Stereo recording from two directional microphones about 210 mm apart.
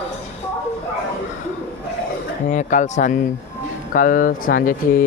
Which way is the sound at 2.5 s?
35° left (ahead or behind).